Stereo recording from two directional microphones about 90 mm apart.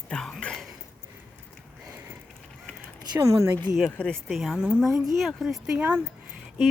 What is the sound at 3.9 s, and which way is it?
Speech, 10° left (ahead or behind).